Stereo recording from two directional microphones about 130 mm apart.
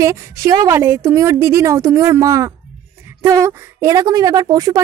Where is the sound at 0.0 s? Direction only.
20° right (ahead or behind).